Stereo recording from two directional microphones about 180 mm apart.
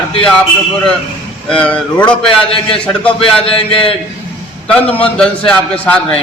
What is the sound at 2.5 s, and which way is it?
A man's voice, 30° left (ahead or behind).